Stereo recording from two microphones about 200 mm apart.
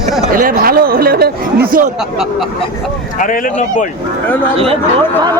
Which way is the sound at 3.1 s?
40° left (ahead or behind).